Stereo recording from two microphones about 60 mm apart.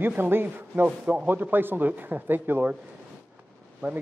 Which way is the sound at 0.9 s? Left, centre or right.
Centre.